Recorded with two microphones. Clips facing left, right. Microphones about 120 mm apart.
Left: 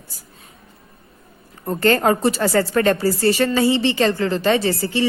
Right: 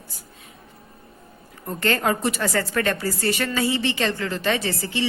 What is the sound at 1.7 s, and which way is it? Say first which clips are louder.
Speech: left 6 dB; 35° left (ahead or behind).